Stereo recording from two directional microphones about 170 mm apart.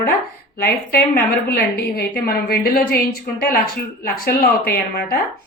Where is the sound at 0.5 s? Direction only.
65° left (ahead or behind).